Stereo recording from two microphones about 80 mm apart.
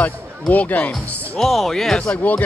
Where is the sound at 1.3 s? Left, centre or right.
Centre.